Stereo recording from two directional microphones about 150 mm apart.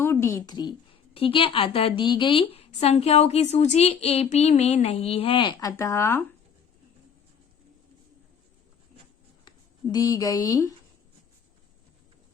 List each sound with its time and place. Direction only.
0.0 s a woman's voice: 15° left (ahead or behind)
9.9 s speech: 25° left (ahead or behind)